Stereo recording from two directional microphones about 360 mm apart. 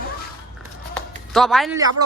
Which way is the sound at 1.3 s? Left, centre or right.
Centre.